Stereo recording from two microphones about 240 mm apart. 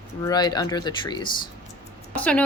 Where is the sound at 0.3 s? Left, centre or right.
Centre.